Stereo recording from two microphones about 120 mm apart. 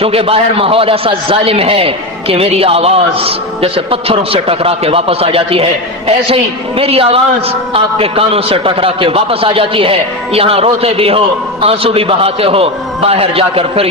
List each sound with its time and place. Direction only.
0.0 s a man's voice: 55° right (ahead or behind)